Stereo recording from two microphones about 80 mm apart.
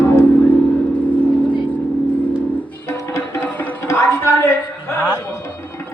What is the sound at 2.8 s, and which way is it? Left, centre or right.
Music, left.